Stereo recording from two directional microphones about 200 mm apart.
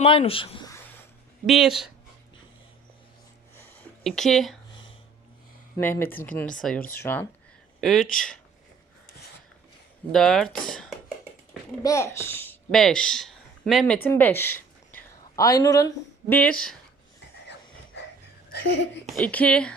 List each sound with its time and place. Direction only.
0.0 s speech: 30° left (ahead or behind)
1.5 s speech: centre (ahead or behind)
4.0 s speech: centre (ahead or behind)
5.7 s speech: 10° left (ahead or behind)
10.1 s speech: centre (ahead or behind)
11.8 s speech: 15° left (ahead or behind)
16.3 s speech: 5° left (ahead or behind)
19.0 s speech: 5° left (ahead or behind)